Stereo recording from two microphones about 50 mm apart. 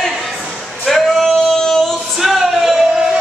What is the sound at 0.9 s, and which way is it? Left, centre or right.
Male singing, centre.